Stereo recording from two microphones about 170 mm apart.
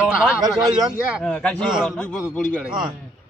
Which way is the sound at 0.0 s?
5° right (ahead or behind).